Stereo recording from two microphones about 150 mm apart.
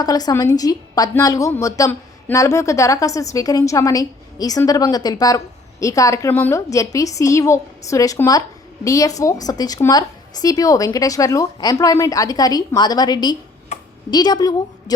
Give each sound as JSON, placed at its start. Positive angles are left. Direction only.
{"t": 0.0, "sound": "a woman's voice", "side_deg": 25}
{"t": 13.7, "sound": "a sound", "side_deg": 50}
{"t": 14.1, "sound": "a woman's voice", "side_deg": 30}